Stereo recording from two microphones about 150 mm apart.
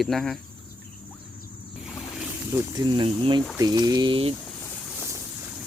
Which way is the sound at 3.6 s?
25° right (ahead or behind).